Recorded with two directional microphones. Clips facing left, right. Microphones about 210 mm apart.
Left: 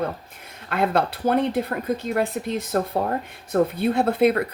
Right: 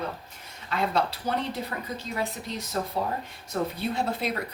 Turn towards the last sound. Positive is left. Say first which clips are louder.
# left 10 dB
turn(degrees=55)  # may be behind; listen again after turning